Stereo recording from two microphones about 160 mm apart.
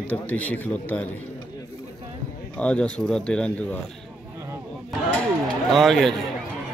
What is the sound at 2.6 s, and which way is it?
Speech, 5° left (ahead or behind).